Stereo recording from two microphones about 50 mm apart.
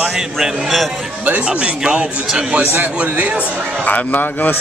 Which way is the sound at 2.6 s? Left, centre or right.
Right.